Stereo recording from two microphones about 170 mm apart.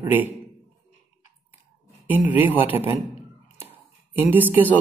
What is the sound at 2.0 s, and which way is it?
Speech, 10° right (ahead or behind).